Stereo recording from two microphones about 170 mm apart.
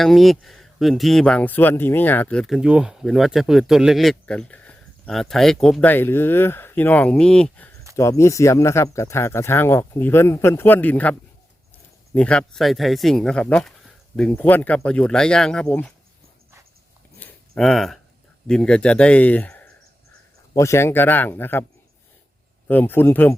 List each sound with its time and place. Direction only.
0.0 s speech: centre (ahead or behind)
7.9 s speech: 15° left (ahead or behind)
17.2 s a sound: 5° left (ahead or behind)
18.4 s speech: 5° left (ahead or behind)
22.7 s speech: 10° left (ahead or behind)